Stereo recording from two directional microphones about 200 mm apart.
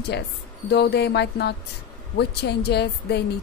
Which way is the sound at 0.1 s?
60° left (ahead or behind).